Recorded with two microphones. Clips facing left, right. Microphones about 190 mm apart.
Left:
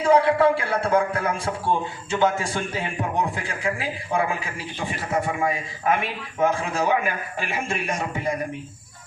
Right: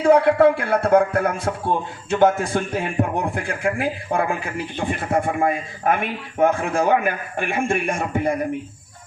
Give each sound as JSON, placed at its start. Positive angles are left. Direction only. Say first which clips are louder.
{"t": 0.0, "sound": "a man's voice", "louder": "right 4 dB", "side_deg": -55}